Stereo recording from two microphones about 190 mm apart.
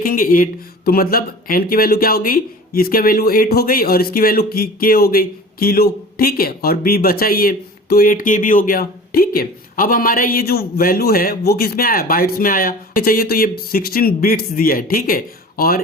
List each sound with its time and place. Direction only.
0.0 s speech: 50° left (ahead or behind)